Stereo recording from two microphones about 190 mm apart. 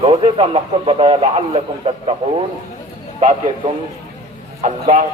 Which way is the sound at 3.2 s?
40° right (ahead or behind).